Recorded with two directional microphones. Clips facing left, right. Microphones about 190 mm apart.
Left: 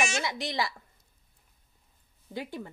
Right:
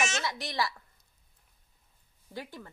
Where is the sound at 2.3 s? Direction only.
15° left (ahead or behind).